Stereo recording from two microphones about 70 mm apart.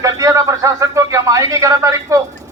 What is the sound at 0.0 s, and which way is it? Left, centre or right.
Speech, right.